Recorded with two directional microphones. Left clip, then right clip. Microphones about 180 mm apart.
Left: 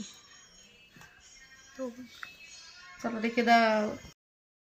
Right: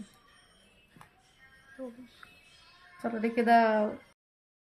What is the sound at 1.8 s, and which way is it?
Speech, 5° left (ahead or behind).